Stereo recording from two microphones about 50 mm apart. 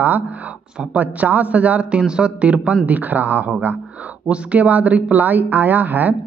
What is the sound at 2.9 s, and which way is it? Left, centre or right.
A man's voice, right.